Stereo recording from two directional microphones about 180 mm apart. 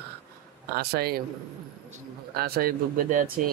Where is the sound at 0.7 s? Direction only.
60° right (ahead or behind).